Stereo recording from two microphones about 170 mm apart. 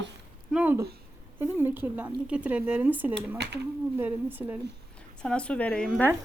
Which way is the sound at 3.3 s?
80° right.